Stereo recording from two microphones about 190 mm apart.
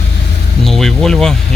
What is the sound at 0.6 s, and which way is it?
Speech, centre (ahead or behind).